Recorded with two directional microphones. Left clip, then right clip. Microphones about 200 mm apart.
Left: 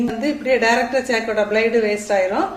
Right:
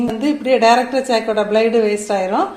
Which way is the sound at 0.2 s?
25° right (ahead or behind).